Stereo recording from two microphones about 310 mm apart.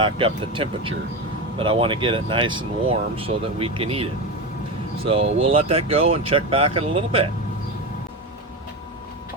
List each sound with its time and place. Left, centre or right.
0.0 s speech: centre